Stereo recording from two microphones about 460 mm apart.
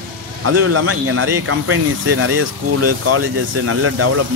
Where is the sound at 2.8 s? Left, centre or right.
Right.